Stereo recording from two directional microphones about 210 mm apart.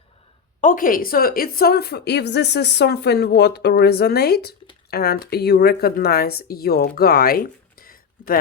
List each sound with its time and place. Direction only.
0.6 s a woman's voice: 40° left (ahead or behind)